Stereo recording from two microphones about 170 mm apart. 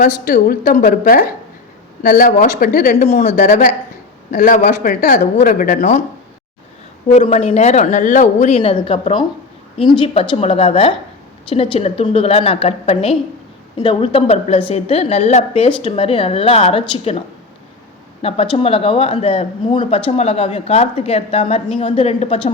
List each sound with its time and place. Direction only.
0.3 s a woman's voice: 50° left (ahead or behind)
3.1 s a woman's voice: 40° left (ahead or behind)
7.1 s speech: 40° left (ahead or behind)